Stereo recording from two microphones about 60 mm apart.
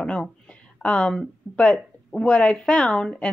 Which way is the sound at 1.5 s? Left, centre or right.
Centre.